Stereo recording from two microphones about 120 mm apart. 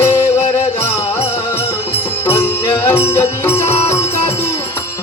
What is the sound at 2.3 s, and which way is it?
Music, 20° left (ahead or behind).